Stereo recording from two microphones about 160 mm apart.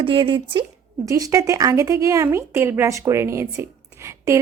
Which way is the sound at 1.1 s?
20° right (ahead or behind).